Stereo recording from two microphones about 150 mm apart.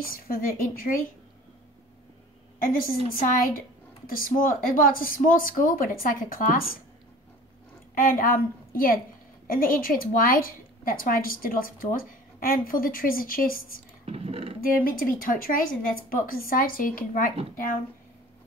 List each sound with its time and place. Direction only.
0.0 s a woman's voice: 70° left (ahead or behind)
2.6 s a woman's voice: 65° left (ahead or behind)
8.0 s a woman's voice: 70° left (ahead or behind)
14.0 s speech: 40° right (ahead or behind)
14.6 s a woman's voice: 70° left (ahead or behind)